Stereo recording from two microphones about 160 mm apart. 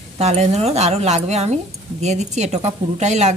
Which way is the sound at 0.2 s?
45° right (ahead or behind).